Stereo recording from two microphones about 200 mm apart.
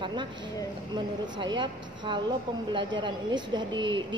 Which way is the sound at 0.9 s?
25° right (ahead or behind).